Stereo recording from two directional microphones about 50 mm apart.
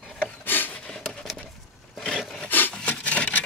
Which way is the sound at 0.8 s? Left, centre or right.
Centre.